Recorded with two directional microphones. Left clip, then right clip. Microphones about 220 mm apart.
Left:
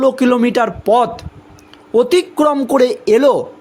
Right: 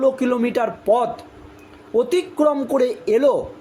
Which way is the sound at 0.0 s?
45° left (ahead or behind).